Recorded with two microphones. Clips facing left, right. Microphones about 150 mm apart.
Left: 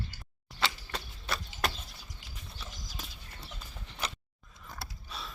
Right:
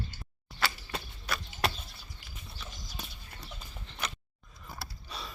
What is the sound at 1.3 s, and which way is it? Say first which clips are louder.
Chop: even; 25° left (ahead or behind).